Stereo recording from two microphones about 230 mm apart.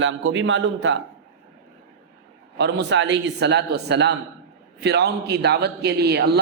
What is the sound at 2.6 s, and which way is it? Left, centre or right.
A man's voice, right.